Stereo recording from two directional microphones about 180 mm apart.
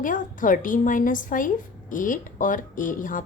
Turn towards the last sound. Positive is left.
turn(degrees=50)  # may be behind; listen again after turning